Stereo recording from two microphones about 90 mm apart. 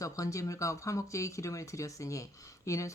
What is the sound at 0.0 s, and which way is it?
Speech, 40° left (ahead or behind).